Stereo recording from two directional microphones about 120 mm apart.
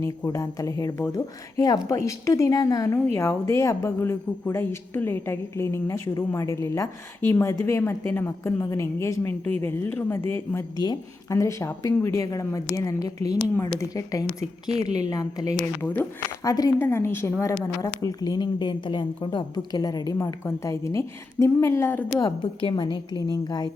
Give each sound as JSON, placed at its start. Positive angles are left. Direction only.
{"t": 0.0, "sound": "a woman's voice", "side_deg": 25}
{"t": 14.7, "sound": "a woman's voice", "side_deg": -65}
{"t": 15.0, "sound": "a woman's voice", "side_deg": 30}
{"t": 15.8, "sound": "speech", "side_deg": 15}
{"t": 16.4, "sound": "a woman's voice", "side_deg": 25}